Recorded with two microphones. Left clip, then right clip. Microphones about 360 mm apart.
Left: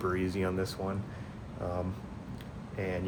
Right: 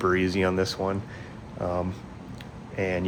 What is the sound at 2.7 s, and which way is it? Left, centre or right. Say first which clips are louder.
Speech: right 8 dB; right.